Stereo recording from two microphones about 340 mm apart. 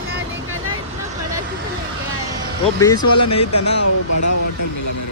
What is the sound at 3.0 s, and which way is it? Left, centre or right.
Speech, left.